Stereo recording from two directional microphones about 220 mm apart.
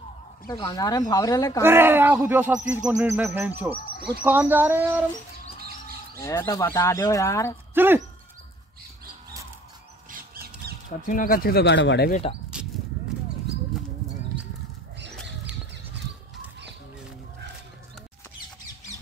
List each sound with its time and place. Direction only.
0.5 s speech: 15° left (ahead or behind)
1.6 s speech: 10° right (ahead or behind)
6.1 s speech: 15° left (ahead or behind)
7.7 s speech: 10° right (ahead or behind)
10.6 s a sound: 45° right (ahead or behind)
11.1 s speech: 40° left (ahead or behind)
12.5 s a sound: 5° right (ahead or behind)